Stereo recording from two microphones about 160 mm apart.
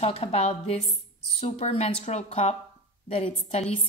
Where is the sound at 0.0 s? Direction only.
40° left (ahead or behind).